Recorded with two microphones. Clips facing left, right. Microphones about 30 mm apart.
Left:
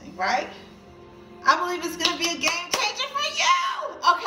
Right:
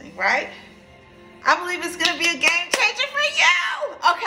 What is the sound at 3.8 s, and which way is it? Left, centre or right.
Speech, right.